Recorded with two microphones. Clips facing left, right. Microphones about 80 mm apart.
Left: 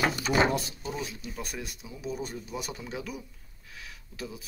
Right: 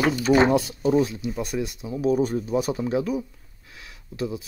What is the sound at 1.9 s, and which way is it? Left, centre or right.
Speech, right.